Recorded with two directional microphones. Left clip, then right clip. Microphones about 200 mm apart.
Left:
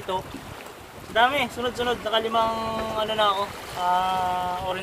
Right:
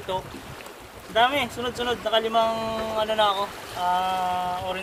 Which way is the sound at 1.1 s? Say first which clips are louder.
Even; 20° right (ahead or behind).